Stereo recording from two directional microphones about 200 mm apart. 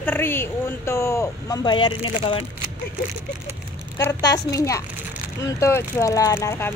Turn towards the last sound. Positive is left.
turn(degrees=15)  # may be behind; listen again after turning